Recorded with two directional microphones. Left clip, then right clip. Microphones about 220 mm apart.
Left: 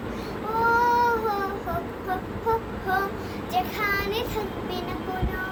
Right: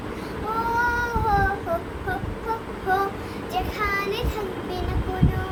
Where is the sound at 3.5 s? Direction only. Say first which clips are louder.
Even; 10° right (ahead or behind).